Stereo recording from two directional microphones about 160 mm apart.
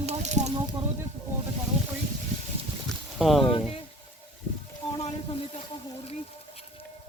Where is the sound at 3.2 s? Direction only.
Centre (ahead or behind).